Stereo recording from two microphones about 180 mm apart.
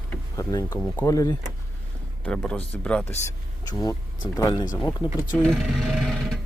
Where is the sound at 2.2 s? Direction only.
5° left (ahead or behind).